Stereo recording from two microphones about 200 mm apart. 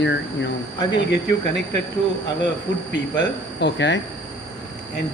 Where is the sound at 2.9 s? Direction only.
60° left (ahead or behind).